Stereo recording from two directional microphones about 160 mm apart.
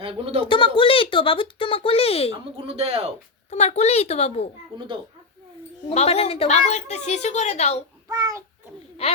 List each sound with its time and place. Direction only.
0.0 s speech: 35° right (ahead or behind)
0.4 s speech: 30° left (ahead or behind)
2.6 s speech: 35° right (ahead or behind)
3.5 s speech: 45° left (ahead or behind)
5.9 s a woman's voice: 40° left (ahead or behind)
8.0 s child singing: 15° right (ahead or behind)